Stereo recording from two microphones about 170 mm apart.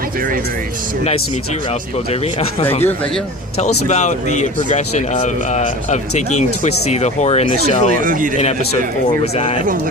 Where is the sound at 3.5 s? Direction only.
45° left (ahead or behind).